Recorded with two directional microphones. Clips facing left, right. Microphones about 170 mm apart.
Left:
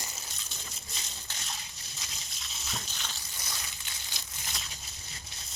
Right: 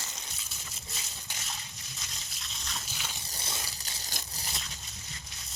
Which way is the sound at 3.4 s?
35° right (ahead or behind).